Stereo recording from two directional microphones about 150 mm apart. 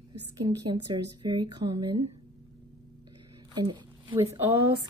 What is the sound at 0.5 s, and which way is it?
Speech, 25° right (ahead or behind).